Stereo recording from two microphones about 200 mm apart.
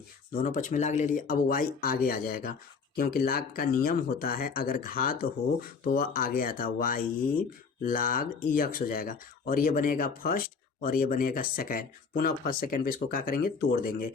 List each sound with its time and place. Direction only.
0.4 s speech: 40° left (ahead or behind)